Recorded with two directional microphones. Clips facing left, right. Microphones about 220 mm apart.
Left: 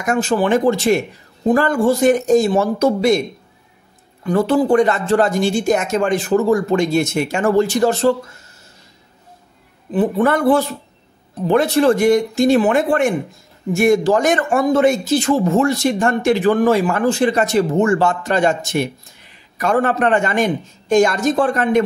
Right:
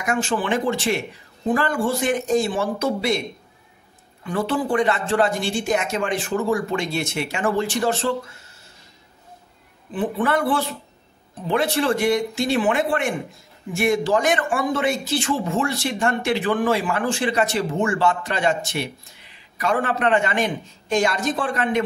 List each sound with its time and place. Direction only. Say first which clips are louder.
0.0 s speech: left 6 dB; 40° left (ahead or behind)
9.9 s speech: left 6 dB; 40° left (ahead or behind)